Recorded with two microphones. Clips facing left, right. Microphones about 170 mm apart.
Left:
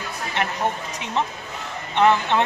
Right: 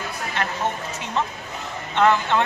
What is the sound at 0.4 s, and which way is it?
Speech, 20° left (ahead or behind).